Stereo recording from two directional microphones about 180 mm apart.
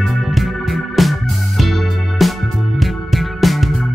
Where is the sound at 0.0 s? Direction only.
Centre (ahead or behind).